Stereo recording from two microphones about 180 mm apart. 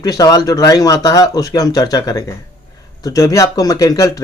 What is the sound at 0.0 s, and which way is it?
Speech, 20° left (ahead or behind).